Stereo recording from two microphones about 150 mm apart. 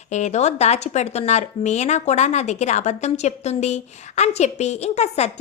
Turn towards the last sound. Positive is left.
turn(degrees=45)  # may be behind; listen again after turning